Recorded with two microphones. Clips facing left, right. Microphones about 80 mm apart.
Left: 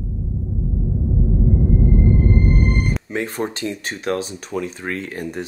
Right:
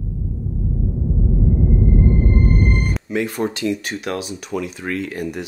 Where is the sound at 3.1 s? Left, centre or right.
Left.